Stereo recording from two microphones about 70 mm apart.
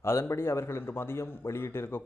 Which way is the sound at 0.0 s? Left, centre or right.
Left.